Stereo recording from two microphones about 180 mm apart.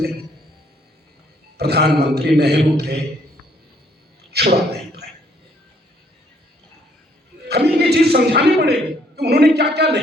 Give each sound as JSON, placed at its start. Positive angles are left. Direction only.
{"t": 1.5, "sound": "a man's voice", "side_deg": -65}
{"t": 4.3, "sound": "a sound", "side_deg": -65}
{"t": 7.4, "sound": "a man's voice", "side_deg": -65}